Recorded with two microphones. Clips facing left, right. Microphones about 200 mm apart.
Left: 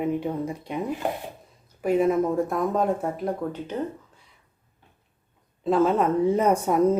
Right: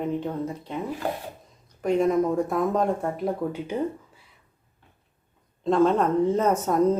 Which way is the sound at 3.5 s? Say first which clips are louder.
Right 2 dB; 10° right (ahead or behind).